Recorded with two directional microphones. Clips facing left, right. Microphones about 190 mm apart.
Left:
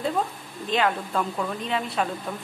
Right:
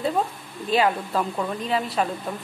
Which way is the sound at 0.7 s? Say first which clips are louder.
Right 3 dB; 5° right (ahead or behind).